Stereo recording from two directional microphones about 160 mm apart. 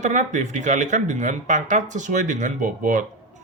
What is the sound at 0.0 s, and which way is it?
Speech, 50° right (ahead or behind).